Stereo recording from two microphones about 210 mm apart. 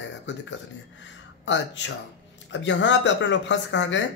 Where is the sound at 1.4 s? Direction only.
60° left (ahead or behind).